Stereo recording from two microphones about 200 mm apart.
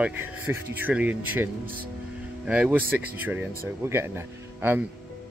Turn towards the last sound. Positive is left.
turn(degrees=-10)  # may be behind; listen again after turning